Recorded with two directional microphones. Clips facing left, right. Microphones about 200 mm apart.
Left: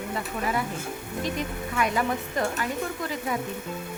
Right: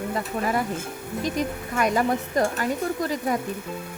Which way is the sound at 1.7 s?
40° right (ahead or behind).